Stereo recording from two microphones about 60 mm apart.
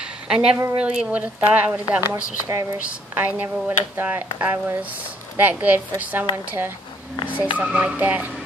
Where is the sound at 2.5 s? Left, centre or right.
Right.